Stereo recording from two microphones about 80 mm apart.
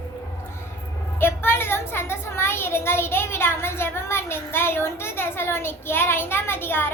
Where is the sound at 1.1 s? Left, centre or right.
Left.